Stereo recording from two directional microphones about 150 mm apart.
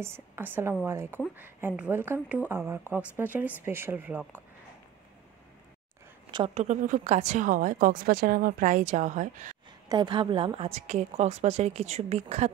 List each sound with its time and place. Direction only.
0.0 s a woman's voice: 15° right (ahead or behind)
6.5 s a woman's voice: 50° right (ahead or behind)
9.8 s a woman's voice: 30° right (ahead or behind)